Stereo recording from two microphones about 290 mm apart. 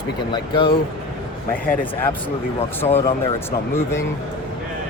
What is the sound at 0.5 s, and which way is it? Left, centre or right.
Speech, centre.